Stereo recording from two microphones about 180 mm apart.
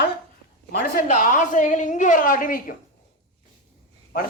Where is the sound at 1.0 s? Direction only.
45° left (ahead or behind).